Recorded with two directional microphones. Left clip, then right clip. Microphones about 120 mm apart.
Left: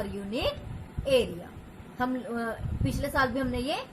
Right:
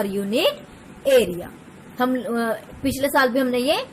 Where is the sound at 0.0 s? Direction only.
60° right (ahead or behind).